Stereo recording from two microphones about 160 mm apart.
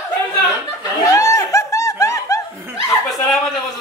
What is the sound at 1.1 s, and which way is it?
Snicker, 20° left (ahead or behind).